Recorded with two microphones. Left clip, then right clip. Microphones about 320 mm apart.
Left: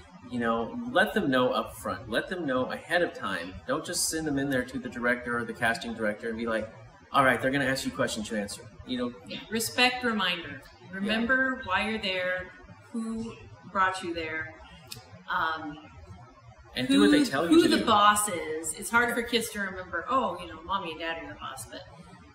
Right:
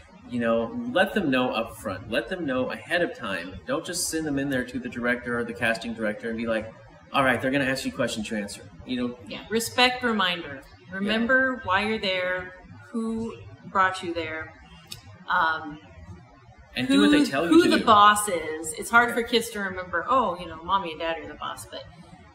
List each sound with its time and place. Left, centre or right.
0.3 s a man's voice: centre
9.3 s a man's voice: centre
13.7 s a man's voice: centre
14.9 s a sound: centre
17.0 s a man's voice: centre
17.5 s a man's voice: centre